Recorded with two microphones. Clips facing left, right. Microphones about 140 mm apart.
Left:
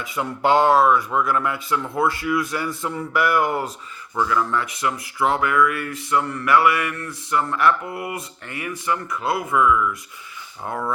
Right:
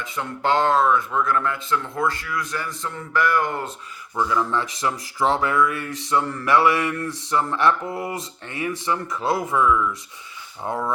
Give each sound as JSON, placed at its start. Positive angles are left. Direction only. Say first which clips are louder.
{"t": 0.2, "sound": "speech", "louder": "left 3 dB", "side_deg": 10}
{"t": 4.3, "sound": "speech", "louder": "even", "side_deg": -25}